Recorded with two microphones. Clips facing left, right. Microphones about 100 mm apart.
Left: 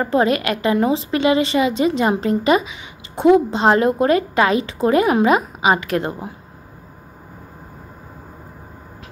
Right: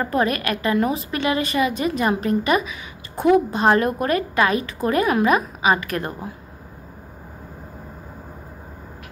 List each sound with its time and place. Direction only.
0.0 s a woman's voice: 25° left (ahead or behind)